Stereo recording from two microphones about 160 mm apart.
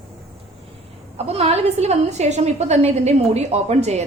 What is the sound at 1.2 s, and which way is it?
A woman's voice, 40° right (ahead or behind).